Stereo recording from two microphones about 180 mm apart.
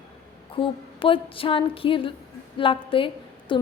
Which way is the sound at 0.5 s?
30° left (ahead or behind).